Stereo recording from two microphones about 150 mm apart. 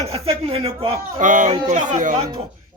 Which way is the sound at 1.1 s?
60° right (ahead or behind).